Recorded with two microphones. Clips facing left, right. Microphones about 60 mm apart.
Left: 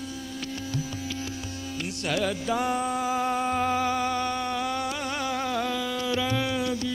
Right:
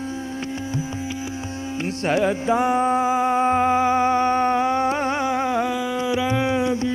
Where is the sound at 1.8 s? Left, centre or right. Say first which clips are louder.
Right 7 dB; right.